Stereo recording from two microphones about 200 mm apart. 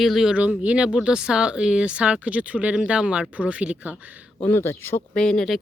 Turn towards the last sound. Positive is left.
turn(degrees=0)  # may be behind; listen again after turning